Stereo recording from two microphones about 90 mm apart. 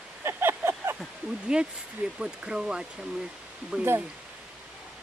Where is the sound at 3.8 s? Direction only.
20° right (ahead or behind).